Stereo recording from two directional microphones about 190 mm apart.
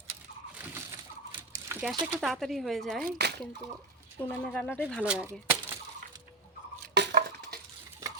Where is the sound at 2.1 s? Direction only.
Centre (ahead or behind).